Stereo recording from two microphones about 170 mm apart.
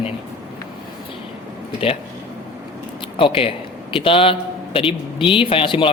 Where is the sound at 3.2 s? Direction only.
35° left (ahead or behind).